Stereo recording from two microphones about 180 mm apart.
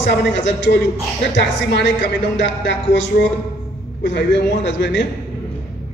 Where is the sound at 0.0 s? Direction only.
75° left (ahead or behind).